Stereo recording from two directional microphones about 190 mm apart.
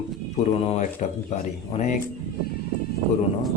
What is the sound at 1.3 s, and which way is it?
Speech, 35° left (ahead or behind).